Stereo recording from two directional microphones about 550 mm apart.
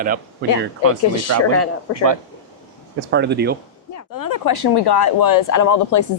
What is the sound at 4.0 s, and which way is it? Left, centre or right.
Speech, left.